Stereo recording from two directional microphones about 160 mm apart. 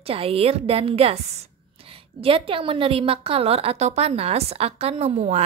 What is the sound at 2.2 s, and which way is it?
A woman's voice, 35° right (ahead or behind).